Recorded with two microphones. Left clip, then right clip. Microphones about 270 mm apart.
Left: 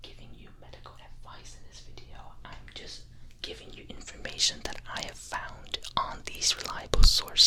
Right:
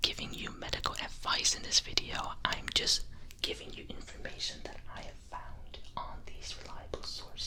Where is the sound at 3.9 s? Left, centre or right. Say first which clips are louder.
Left 4 dB; centre; by 7.4 s left.